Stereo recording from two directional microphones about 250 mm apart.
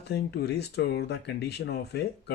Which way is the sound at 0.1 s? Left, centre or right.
Left.